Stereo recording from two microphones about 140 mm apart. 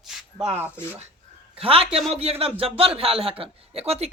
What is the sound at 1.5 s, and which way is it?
A man's voice, 45° right (ahead or behind).